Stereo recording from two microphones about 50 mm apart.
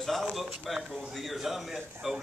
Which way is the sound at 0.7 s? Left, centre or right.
Centre.